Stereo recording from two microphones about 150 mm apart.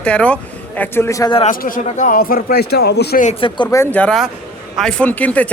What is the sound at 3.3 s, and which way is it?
Speech, 35° left (ahead or behind).